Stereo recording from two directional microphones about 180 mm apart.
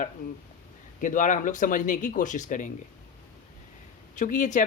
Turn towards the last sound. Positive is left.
turn(degrees=45)  # may be behind; listen again after turning